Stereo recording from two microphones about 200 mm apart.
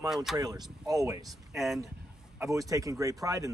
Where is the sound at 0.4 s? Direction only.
20° right (ahead or behind).